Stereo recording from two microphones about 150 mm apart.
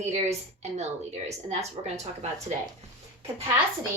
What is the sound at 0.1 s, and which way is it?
Speech, 45° right (ahead or behind).